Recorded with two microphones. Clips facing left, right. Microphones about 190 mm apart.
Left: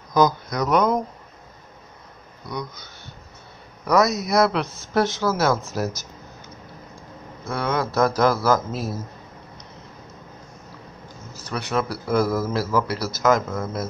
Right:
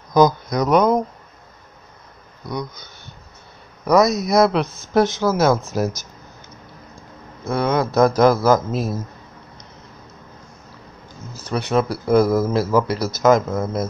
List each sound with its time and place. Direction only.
0.1 s speech: 20° right (ahead or behind)
2.5 s a man's voice: 15° right (ahead or behind)
7.4 s speech: 20° right (ahead or behind)
11.4 s speech: 25° right (ahead or behind)